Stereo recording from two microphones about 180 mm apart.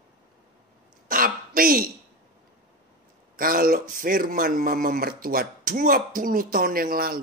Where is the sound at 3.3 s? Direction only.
50° right (ahead or behind).